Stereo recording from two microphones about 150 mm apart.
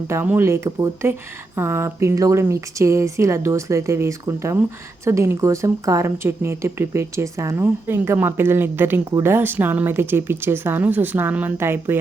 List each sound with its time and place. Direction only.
0.1 s a woman's voice: 15° right (ahead or behind)